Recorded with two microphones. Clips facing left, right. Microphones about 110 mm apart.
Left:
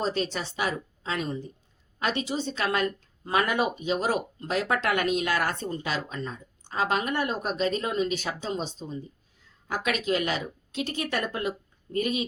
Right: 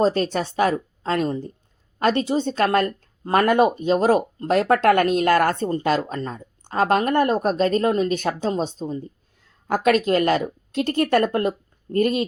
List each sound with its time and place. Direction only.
0.0 s speech: 50° right (ahead or behind)